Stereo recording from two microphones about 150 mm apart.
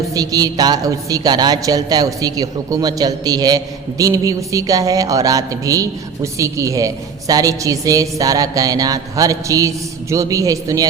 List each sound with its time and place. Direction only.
0.1 s a woman's voice: 25° right (ahead or behind)